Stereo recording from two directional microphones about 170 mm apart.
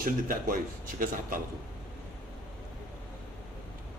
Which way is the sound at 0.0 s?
55° right (ahead or behind).